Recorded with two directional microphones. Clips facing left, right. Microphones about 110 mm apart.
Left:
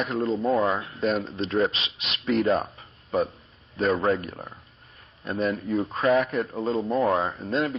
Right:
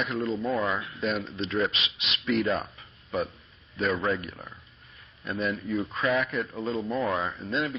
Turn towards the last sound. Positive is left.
turn(degrees=45)  # may be behind; listen again after turning